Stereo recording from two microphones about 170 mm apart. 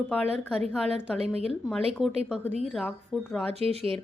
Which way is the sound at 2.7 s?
5° left (ahead or behind).